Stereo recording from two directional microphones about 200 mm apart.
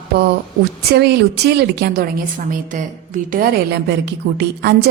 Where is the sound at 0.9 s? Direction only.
55° right (ahead or behind).